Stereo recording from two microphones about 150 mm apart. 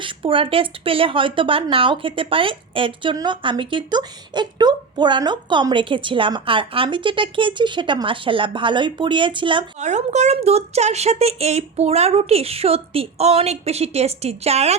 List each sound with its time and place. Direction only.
0.0 s speech: 35° right (ahead or behind)
9.8 s a woman's voice: 50° right (ahead or behind)